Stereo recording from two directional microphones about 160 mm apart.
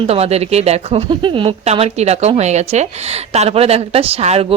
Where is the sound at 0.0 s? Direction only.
40° right (ahead or behind).